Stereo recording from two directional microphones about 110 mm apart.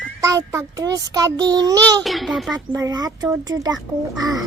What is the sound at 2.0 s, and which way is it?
Speech, centre (ahead or behind).